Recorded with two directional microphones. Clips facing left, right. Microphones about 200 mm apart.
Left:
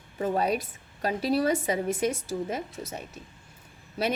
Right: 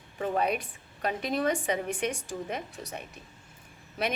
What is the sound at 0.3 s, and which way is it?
A woman's voice, 35° left (ahead or behind).